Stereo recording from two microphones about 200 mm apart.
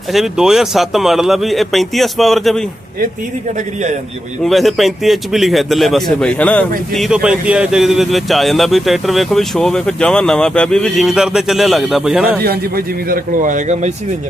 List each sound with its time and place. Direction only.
0.1 s a man's voice: centre (ahead or behind)
4.4 s a man's voice: centre (ahead or behind)
12.4 s a man's voice: 50° right (ahead or behind)